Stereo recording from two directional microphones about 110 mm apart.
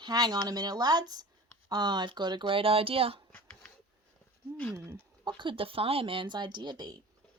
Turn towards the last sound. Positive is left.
turn(degrees=-40)  # may be behind; listen again after turning